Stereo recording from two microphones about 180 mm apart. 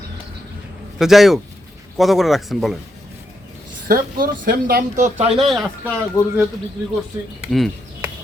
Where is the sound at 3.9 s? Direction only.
55° right (ahead or behind).